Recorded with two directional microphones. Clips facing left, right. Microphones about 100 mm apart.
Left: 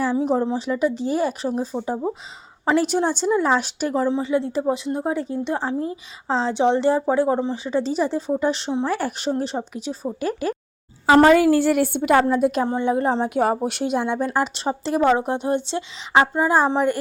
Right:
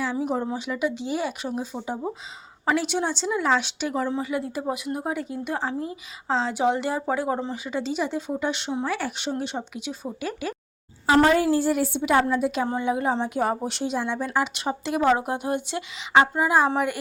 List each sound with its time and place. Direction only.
0.0 s speech: 30° left (ahead or behind)
4.1 s a woman's voice: 25° left (ahead or behind); by 10.5 s 40° left (ahead or behind)
11.5 s a woman's voice: 70° left (ahead or behind); by 12.6 s 45° left (ahead or behind)
12.6 s a woman's voice: 20° left (ahead or behind)
12.9 s speech: 35° left (ahead or behind)
13.2 s a woman's voice: 60° left (ahead or behind); by 16.9 s 30° left (ahead or behind)